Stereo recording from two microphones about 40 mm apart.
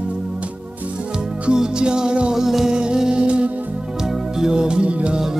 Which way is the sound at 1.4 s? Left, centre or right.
Right.